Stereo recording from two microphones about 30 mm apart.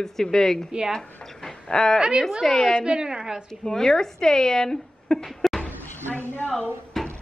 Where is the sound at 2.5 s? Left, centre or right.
Centre.